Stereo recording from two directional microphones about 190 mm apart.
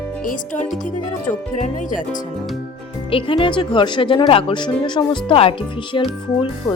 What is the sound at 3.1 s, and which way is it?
A woman's voice, 25° left (ahead or behind).